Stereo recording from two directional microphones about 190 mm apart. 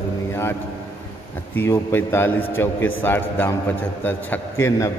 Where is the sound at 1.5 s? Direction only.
10° left (ahead or behind).